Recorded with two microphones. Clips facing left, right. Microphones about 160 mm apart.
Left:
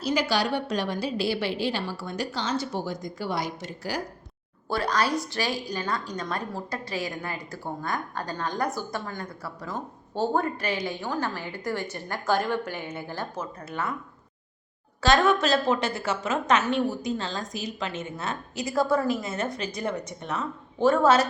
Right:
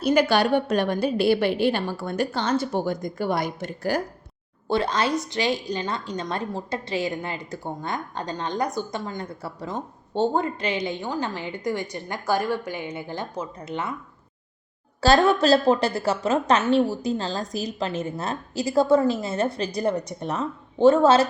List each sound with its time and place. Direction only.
0.0 s a woman's voice: 55° right (ahead or behind)
4.7 s a woman's voice: 25° right (ahead or behind)
15.0 s a woman's voice: 35° right (ahead or behind)